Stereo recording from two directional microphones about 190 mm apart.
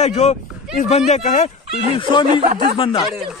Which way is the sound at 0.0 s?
35° left (ahead or behind).